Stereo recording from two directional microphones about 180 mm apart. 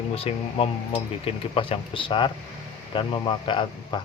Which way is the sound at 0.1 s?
35° left (ahead or behind).